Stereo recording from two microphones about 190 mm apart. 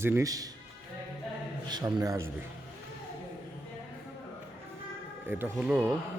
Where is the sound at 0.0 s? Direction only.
15° right (ahead or behind).